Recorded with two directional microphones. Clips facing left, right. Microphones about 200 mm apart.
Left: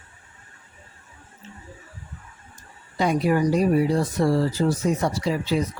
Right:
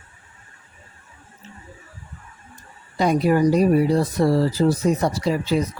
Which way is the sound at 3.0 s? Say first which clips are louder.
Right 3 dB; 40° right (ahead or behind).